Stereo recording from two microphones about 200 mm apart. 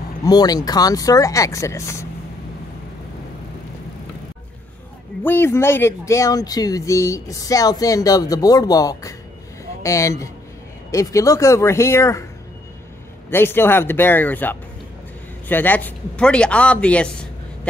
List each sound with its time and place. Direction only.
0.2 s speech: 20° left (ahead or behind)
5.2 s speech: 10° left (ahead or behind)
13.3 s a man's voice: 10° left (ahead or behind)